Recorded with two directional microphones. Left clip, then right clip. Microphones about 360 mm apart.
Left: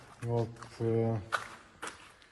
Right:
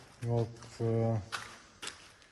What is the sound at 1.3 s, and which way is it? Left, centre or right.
Walk, centre.